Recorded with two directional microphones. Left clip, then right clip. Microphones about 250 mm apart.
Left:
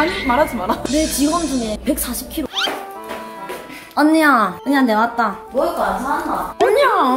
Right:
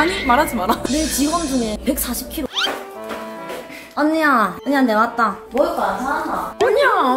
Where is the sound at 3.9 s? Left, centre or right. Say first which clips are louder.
Left 3 dB; centre.